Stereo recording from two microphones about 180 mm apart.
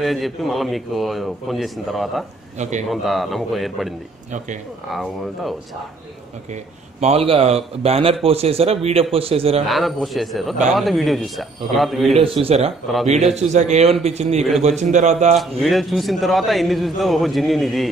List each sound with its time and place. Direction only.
0.0 s a man's voice: centre (ahead or behind)
2.5 s a man's voice: 40° right (ahead or behind)
2.9 s a man's voice: centre (ahead or behind)
6.5 s a man's voice: 35° right (ahead or behind)
9.7 s a man's voice: centre (ahead or behind)
12.2 s a man's voice: 30° right (ahead or behind)
15.6 s a man's voice: centre (ahead or behind)